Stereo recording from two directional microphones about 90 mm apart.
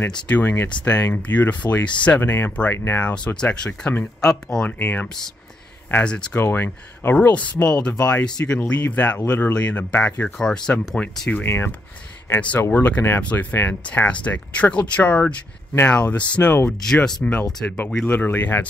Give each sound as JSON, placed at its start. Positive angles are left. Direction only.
{"t": 0.3, "sound": "speech", "side_deg": 20}
{"t": 3.0, "sound": "speech", "side_deg": 15}
{"t": 4.2, "sound": "speech", "side_deg": 5}
{"t": 4.6, "sound": "speech", "side_deg": 20}
{"t": 6.0, "sound": "speech", "side_deg": 10}
{"t": 6.3, "sound": "speech", "side_deg": 25}
{"t": 11.4, "sound": "speech", "side_deg": 25}
{"t": 12.4, "sound": "speech", "side_deg": 15}
{"t": 17.5, "sound": "speech", "side_deg": 5}
{"t": 18.1, "sound": "speech", "side_deg": 20}